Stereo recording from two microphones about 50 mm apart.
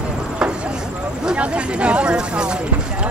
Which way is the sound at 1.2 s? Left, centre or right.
Right.